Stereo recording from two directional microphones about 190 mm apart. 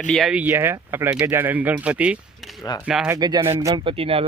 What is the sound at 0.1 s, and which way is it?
Speech, centre (ahead or behind).